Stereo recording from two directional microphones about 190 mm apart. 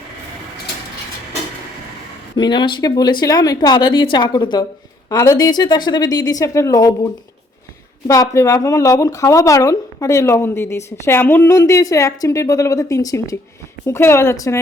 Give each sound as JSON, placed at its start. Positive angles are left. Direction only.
{"t": 2.3, "sound": "speech", "side_deg": 25}